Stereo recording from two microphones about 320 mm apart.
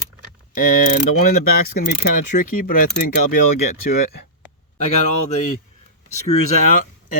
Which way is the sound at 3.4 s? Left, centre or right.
Left.